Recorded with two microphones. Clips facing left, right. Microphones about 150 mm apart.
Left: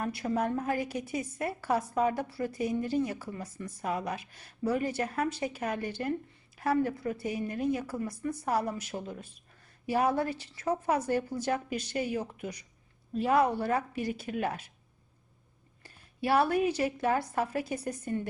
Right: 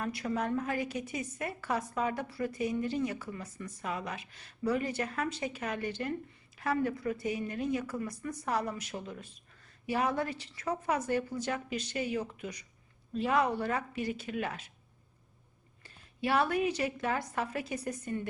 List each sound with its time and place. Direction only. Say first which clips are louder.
0.0 s a woman's voice: left 3 dB; 30° left (ahead or behind)
8.4 s a woman's voice: left 2 dB; 10° left (ahead or behind)
9.8 s a woman's voice: left 3 dB; 35° left (ahead or behind)
15.8 s a woman's voice: left 1 dB; 35° left (ahead or behind)